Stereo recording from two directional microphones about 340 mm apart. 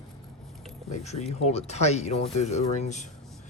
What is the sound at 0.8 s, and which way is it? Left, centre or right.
Speech, centre.